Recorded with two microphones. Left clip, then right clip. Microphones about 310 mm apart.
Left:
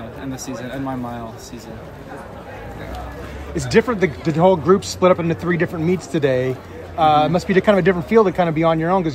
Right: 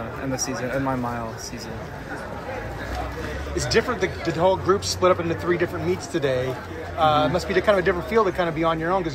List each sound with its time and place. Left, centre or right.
3.5 s speech: left